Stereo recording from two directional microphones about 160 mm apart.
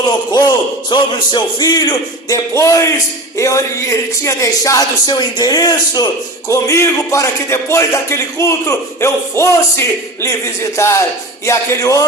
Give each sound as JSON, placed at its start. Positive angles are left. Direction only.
{"t": 0.3, "sound": "speech", "side_deg": 25}